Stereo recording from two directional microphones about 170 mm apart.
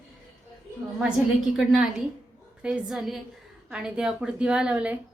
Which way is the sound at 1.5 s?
Centre (ahead or behind).